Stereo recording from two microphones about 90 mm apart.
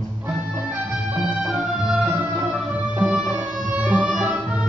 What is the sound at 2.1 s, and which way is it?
Music, 20° right (ahead or behind).